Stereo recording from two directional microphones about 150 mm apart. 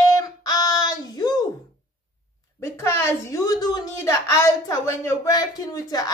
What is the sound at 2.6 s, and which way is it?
A woman's voice, 20° left (ahead or behind).